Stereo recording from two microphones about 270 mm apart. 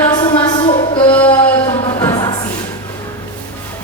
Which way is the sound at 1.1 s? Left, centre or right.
Centre.